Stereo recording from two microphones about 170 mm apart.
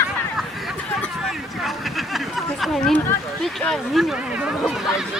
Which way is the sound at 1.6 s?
Centre (ahead or behind).